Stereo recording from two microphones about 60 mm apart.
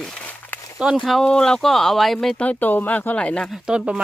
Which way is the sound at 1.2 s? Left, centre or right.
Centre.